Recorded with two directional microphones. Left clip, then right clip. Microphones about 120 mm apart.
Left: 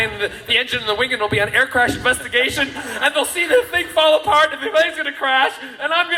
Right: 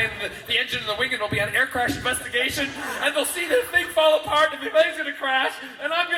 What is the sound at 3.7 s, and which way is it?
A man's voice, 50° left (ahead or behind).